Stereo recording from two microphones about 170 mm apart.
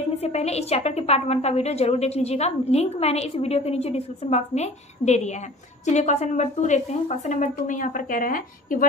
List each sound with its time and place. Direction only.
0.2 s a woman's voice: 40° left (ahead or behind); by 8.8 s 55° left (ahead or behind)